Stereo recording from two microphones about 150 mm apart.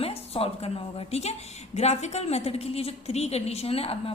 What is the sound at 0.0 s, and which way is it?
A woman's voice, 40° left (ahead or behind).